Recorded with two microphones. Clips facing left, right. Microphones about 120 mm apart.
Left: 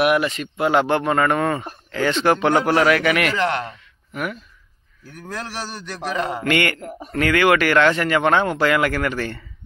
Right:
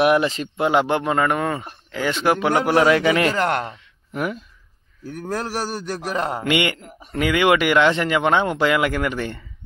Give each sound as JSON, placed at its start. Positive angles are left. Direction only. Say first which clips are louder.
{"t": 0.0, "sound": "speech", "louder": "right 1 dB", "side_deg": -30}
{"t": 0.7, "sound": "speech", "louder": "left 1 dB", "side_deg": -15}
{"t": 3.3, "sound": "a man's voice", "louder": "right 1 dB", "side_deg": -45}
{"t": 3.6, "sound": "speech", "louder": "right 1 dB", "side_deg": -25}
{"t": 5.0, "sound": "a man's voice", "louder": "right 5 dB", "side_deg": -40}
{"t": 6.4, "sound": "speech", "louder": "left 2 dB", "side_deg": -15}
{"t": 6.8, "sound": "speech", "louder": "left 9 dB", "side_deg": 40}
{"t": 7.2, "sound": "speech", "louder": "left 1 dB", "side_deg": -15}